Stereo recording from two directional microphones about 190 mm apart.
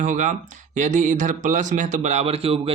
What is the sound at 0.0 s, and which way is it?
Speech, 40° right (ahead or behind).